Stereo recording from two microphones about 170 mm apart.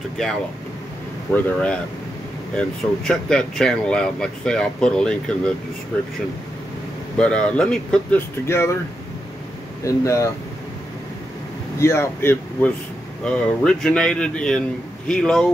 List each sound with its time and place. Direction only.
1.3 s speech: 5° left (ahead or behind)
7.2 s speech: 5° left (ahead or behind)
9.8 s speech: 20° left (ahead or behind)
11.8 s speech: 15° left (ahead or behind)